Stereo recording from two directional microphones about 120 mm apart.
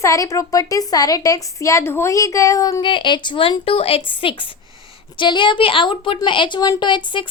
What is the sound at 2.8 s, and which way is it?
Speech, 40° left (ahead or behind).